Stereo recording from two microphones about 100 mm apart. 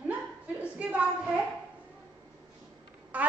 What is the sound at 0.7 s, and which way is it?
Speech, 15° right (ahead or behind).